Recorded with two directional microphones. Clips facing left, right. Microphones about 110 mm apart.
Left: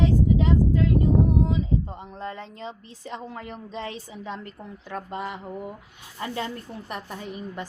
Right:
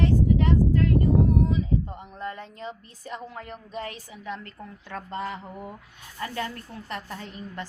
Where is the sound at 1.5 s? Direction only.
25° left (ahead or behind).